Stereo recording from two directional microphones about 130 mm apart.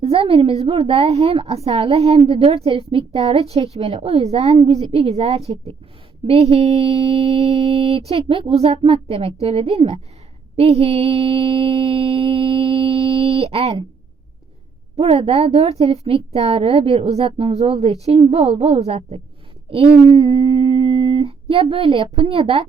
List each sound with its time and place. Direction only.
0.0 s mantra: 50° right (ahead or behind)
13.1 s a sound: 50° right (ahead or behind)
13.4 s mantra: 50° right (ahead or behind)
14.9 s mantra: 50° right (ahead or behind)
20.1 s speech: 35° right (ahead or behind)